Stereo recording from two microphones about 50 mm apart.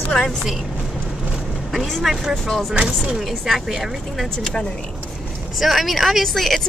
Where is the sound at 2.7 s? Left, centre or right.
Centre.